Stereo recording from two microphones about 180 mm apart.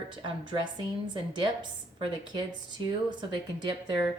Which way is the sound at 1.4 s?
25° right (ahead or behind).